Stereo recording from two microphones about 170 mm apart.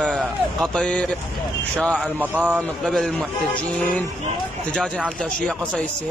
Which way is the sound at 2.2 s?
10° right (ahead or behind).